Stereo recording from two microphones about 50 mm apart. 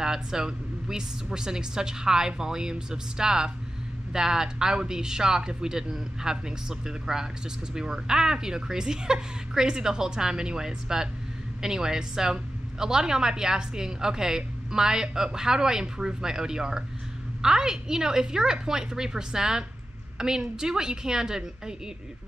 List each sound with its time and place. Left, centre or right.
0.0 s a woman's voice: centre